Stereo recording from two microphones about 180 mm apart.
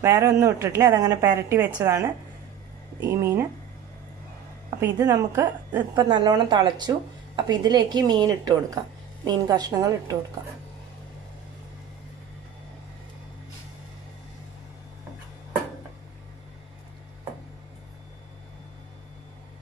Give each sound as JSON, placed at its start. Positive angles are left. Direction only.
{"t": 0.0, "sound": "a woman's voice", "side_deg": -15}
{"t": 4.7, "sound": "a woman's voice", "side_deg": -15}
{"t": 5.9, "sound": "speech", "side_deg": -25}